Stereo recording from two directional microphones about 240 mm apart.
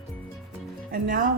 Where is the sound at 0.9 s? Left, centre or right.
Right.